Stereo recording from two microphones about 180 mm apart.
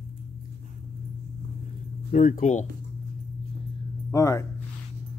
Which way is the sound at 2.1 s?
45° left (ahead or behind).